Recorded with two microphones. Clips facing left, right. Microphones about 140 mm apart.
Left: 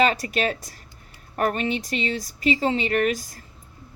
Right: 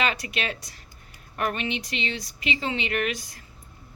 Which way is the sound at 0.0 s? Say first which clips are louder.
Left 6 dB; 40° left (ahead or behind).